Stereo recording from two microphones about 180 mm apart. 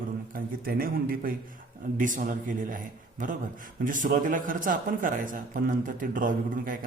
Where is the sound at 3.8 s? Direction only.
45° right (ahead or behind).